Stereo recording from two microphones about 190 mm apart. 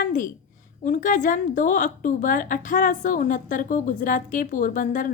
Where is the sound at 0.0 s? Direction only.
45° left (ahead or behind).